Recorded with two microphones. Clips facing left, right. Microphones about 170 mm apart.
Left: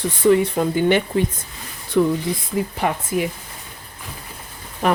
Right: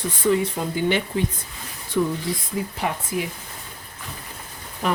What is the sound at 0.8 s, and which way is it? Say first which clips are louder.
Speech: left 4 dB; 55° left (ahead or behind).